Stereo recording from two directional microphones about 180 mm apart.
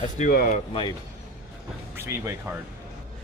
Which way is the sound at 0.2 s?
50° left (ahead or behind).